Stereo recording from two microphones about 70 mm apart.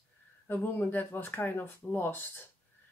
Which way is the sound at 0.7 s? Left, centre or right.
Left.